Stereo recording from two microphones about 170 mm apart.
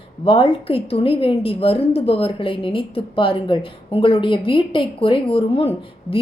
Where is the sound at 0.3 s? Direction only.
35° left (ahead or behind).